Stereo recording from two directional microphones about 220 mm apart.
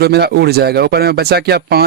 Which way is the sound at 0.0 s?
50° right (ahead or behind).